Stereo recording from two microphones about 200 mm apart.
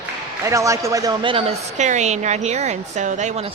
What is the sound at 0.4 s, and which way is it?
A woman's voice, 15° right (ahead or behind).